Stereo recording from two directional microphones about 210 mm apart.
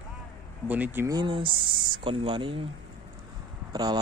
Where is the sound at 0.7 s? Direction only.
10° right (ahead or behind); by 2.6 s 25° right (ahead or behind).